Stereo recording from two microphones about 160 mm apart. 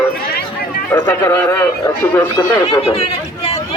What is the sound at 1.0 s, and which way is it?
Speech, 15° left (ahead or behind).